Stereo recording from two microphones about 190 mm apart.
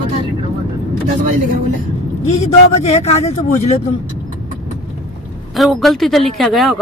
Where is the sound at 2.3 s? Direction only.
35° left (ahead or behind).